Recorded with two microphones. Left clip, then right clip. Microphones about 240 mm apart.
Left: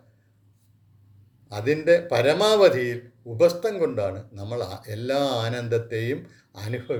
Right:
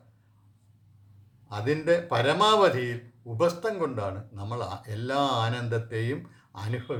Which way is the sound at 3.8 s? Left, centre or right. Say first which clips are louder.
Left 6 dB; centre.